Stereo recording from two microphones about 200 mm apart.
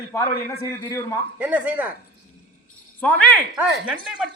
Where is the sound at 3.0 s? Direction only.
5° left (ahead or behind).